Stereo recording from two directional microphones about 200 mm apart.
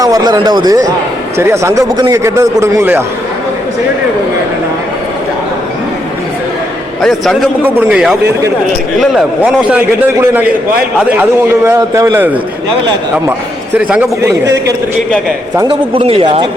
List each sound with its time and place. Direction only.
0.0 s a man's voice: 20° right (ahead or behind)
7.0 s a man's voice: centre (ahead or behind)
13.7 s a man's voice: 5° right (ahead or behind)
15.6 s speech: 25° right (ahead or behind)